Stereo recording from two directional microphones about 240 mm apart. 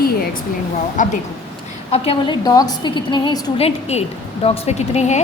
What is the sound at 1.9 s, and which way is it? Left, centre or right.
A woman's voice, left.